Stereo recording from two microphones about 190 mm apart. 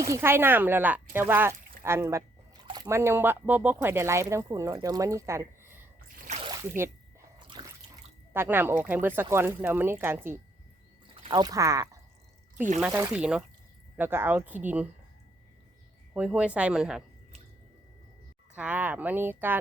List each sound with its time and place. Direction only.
0.0 s speech: 15° right (ahead or behind)
6.2 s a sound: 35° right (ahead or behind)
6.5 s speech: 15° right (ahead or behind)
7.6 s water: 25° right (ahead or behind)
8.3 s speech: 10° right (ahead or behind)
11.1 s speech: 25° right (ahead or behind); by 14.8 s 10° right (ahead or behind)
16.1 s speech: 5° right (ahead or behind)
18.5 s speech: 5° right (ahead or behind)